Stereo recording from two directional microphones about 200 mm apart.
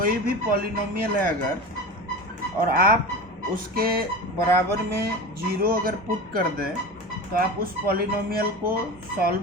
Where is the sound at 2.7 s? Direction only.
45° right (ahead or behind).